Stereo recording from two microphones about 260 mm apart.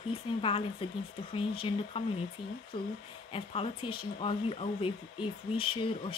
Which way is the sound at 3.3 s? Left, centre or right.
Left.